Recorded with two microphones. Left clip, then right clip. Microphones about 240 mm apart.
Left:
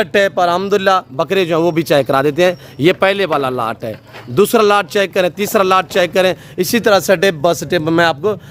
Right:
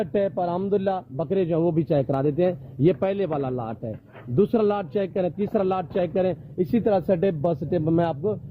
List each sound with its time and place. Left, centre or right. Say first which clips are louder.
0.0 s speech: left 11 dB; centre
8.1 s a man's voice: left 10 dB; left